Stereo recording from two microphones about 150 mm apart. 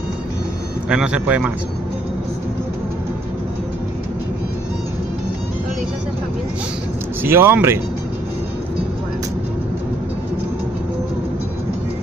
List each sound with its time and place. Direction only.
0.8 s speech: 5° right (ahead or behind)
7.2 s speech: 15° right (ahead or behind)